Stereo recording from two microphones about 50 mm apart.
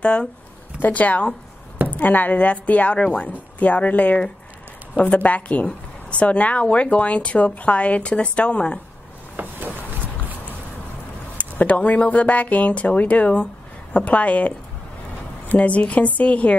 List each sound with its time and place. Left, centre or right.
0.0 s speech: centre
0.7 s speech: left
9.4 s a sound: right
11.3 s speech: left
15.5 s speech: left